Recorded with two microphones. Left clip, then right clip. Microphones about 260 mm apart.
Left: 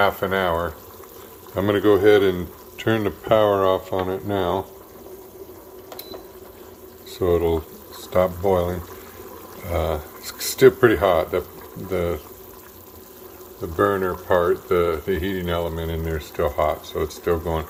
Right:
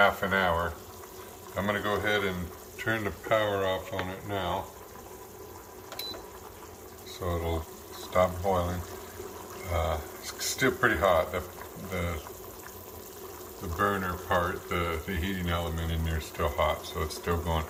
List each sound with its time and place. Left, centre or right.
0.0 s speech: left
7.1 s boiling: left
8.1 s speech: left
9.7 s speech: left
13.7 s speech: left